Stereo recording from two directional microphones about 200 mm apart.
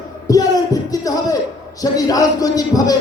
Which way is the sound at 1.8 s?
20° left (ahead or behind).